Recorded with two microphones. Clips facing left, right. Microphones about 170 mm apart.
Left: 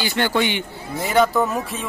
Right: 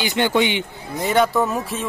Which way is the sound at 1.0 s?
Centre (ahead or behind).